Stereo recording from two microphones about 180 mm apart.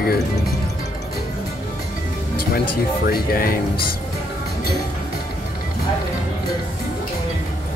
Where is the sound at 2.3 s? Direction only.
60° left (ahead or behind).